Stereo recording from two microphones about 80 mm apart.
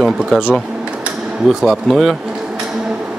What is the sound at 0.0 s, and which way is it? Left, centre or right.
Speech, centre.